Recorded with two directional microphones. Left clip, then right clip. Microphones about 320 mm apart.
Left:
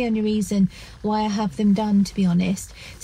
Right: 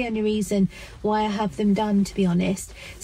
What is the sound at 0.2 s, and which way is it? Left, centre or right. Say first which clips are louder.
Speech: even; centre.